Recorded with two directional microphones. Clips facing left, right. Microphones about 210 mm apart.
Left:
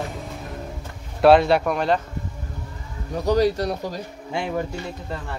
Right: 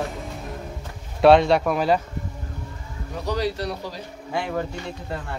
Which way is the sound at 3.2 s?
45° left (ahead or behind).